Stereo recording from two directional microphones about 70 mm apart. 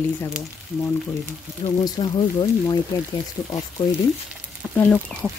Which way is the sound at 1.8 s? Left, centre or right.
Left.